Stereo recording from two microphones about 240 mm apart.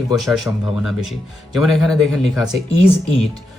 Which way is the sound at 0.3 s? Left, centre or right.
Centre.